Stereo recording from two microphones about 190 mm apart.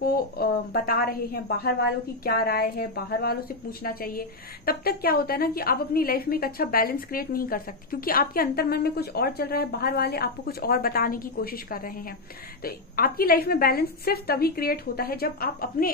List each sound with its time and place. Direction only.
0.0 s a woman's voice: 50° left (ahead or behind)